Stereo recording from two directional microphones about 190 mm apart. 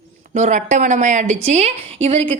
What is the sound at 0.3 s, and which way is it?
A woman's voice, 40° right (ahead or behind).